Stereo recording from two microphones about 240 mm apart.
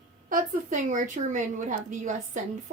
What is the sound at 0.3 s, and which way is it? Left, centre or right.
A woman's voice, right.